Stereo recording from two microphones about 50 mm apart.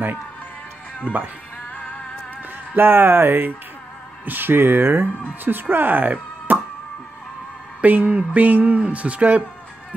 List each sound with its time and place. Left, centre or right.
2.7 s speech: right
7.8 s speech: right